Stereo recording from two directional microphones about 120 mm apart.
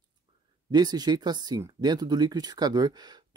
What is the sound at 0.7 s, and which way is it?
Speech, 35° right (ahead or behind).